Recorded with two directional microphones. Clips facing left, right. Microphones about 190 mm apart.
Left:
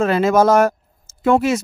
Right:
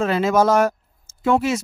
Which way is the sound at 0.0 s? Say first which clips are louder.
Left 3 dB; 50° left (ahead or behind).